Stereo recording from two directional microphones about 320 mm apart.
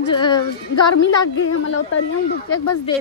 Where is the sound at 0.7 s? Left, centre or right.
Left.